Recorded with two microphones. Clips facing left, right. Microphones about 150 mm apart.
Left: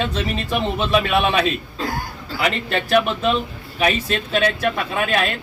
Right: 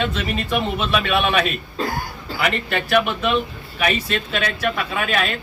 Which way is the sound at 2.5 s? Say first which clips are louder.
Left 1 dB; 30° left (ahead or behind).